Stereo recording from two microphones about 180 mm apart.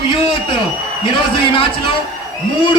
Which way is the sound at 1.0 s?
30° left (ahead or behind).